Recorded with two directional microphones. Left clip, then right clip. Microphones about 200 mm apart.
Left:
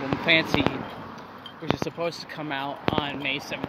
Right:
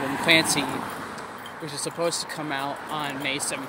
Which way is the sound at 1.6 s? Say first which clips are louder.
Even; 5° left (ahead or behind).